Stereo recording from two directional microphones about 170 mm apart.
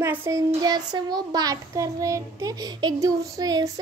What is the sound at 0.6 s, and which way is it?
Child singing, 25° right (ahead or behind).